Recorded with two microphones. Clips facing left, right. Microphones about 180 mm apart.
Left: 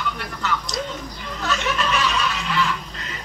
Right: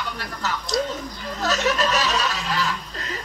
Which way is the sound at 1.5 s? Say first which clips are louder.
Right 2 dB; 40° right (ahead or behind).